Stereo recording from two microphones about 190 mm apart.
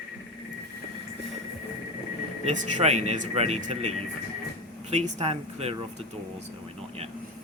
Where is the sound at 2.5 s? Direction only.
40° right (ahead or behind).